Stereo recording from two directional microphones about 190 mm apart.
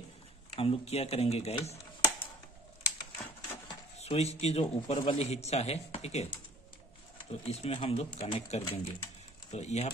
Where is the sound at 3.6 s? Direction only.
35° left (ahead or behind).